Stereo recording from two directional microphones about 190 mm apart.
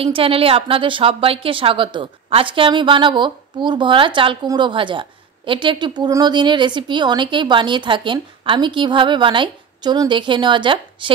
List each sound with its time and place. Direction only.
0.0 s a woman's voice: 30° right (ahead or behind)